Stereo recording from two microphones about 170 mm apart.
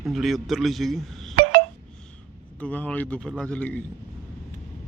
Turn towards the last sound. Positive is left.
turn(degrees=10)  # may be behind; listen again after turning